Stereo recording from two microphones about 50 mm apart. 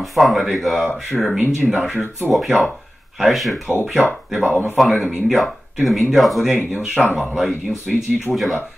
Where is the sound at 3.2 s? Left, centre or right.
Centre.